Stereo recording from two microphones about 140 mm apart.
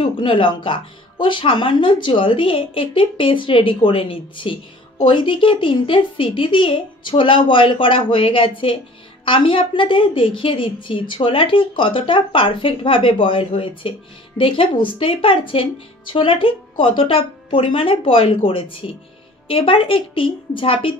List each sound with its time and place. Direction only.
0.0 s speech: 35° left (ahead or behind)